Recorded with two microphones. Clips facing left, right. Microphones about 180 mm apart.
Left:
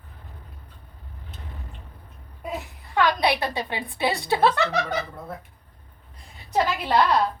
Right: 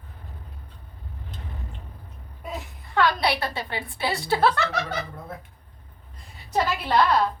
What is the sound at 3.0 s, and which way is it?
A woman's voice, 20° left (ahead or behind).